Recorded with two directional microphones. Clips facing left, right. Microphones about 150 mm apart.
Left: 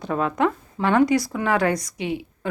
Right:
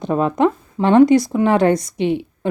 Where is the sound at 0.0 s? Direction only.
20° right (ahead or behind).